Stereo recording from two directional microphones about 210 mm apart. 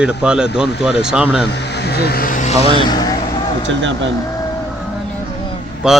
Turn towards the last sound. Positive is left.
turn(degrees=-5)  # may be behind; listen again after turning